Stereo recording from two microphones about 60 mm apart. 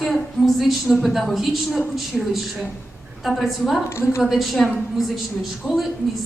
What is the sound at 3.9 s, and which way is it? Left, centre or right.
Speech, left.